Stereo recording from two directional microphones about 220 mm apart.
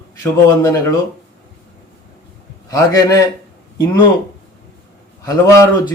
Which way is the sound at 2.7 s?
15° left (ahead or behind).